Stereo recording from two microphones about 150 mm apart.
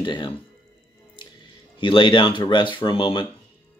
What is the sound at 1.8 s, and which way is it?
Speech, 35° left (ahead or behind).